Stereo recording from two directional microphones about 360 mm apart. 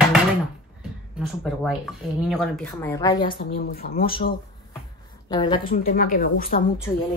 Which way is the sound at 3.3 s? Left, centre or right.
Left.